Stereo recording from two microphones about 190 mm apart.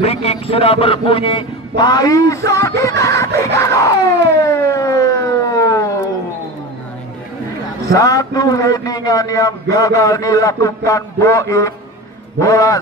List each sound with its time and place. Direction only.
0.0 s a man's voice: 30° left (ahead or behind); by 2.7 s 15° left (ahead or behind)
2.8 s screaming: 15° left (ahead or behind)
4.5 s siren: 15° left (ahead or behind)
7.9 s a man's voice: 15° left (ahead or behind)